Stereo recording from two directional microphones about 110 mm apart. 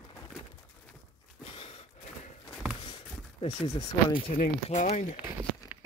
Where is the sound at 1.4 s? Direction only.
60° left (ahead or behind).